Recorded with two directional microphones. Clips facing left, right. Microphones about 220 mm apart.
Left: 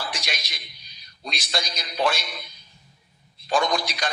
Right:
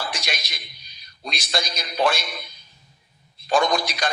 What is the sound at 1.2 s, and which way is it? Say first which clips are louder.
A man's voice: right 2 dB; 50° right (ahead or behind).